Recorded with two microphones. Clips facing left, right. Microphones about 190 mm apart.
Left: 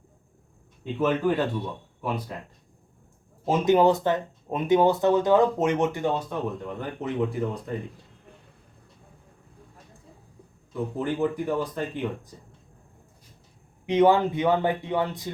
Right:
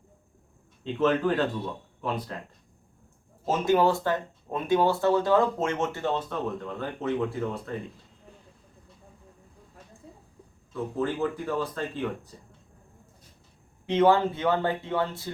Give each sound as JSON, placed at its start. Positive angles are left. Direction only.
{"t": 0.9, "sound": "speech", "side_deg": 10}
{"t": 3.4, "sound": "speech", "side_deg": 15}
{"t": 10.7, "sound": "speech", "side_deg": 15}
{"t": 13.8, "sound": "speech", "side_deg": 15}